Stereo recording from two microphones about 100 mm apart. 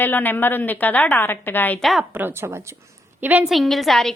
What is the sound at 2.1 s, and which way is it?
Speech, 20° right (ahead or behind).